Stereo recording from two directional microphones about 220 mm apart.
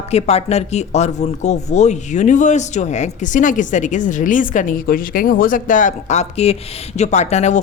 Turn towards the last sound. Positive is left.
turn(degrees=30)  # may be behind; listen again after turning